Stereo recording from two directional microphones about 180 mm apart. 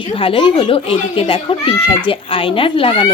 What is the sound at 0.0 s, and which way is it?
Speech, 30° left (ahead or behind).